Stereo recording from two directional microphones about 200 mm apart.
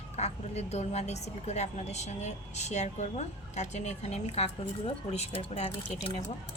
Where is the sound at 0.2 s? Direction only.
35° left (ahead or behind).